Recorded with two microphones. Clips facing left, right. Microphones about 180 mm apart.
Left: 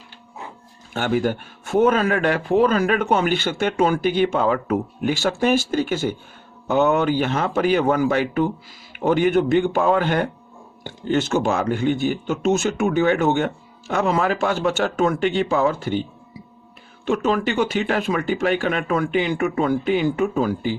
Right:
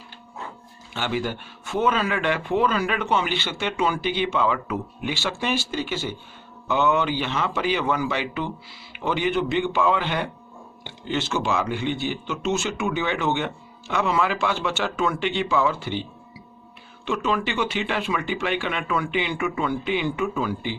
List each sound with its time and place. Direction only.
0.9 s speech: 50° left (ahead or behind)